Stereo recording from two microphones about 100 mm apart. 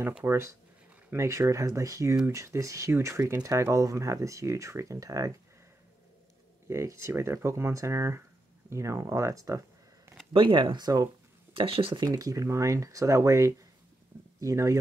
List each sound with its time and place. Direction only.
0.2 s speech: 30° right (ahead or behind)
6.7 s speech: 30° right (ahead or behind)
10.3 s speech: 55° right (ahead or behind)
11.5 s speech: 65° right (ahead or behind)
12.0 s speech: 35° right (ahead or behind)